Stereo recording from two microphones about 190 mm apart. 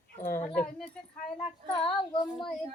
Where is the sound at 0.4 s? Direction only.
5° left (ahead or behind).